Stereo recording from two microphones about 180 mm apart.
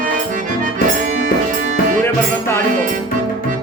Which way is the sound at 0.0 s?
45° right (ahead or behind).